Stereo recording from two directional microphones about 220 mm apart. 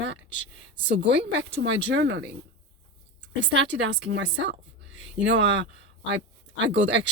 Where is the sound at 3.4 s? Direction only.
55° right (ahead or behind).